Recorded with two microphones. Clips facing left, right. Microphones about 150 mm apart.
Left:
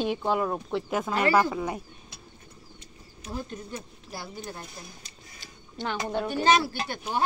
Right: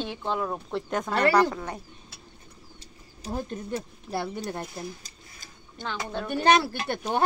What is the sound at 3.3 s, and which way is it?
Speech, 55° right (ahead or behind).